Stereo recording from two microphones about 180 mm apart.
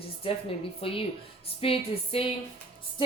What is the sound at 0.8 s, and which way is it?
Speech, 30° left (ahead or behind).